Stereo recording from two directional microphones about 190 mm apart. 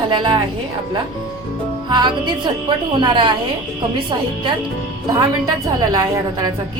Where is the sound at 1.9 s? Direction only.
25° right (ahead or behind).